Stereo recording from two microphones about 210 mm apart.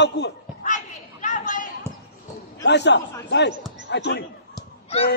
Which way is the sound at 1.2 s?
35° left (ahead or behind).